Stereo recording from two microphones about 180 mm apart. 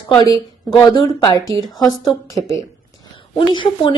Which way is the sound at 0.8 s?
20° left (ahead or behind).